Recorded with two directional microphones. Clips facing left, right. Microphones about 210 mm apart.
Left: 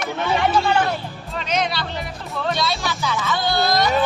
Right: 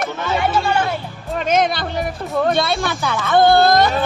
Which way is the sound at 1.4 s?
50° right (ahead or behind).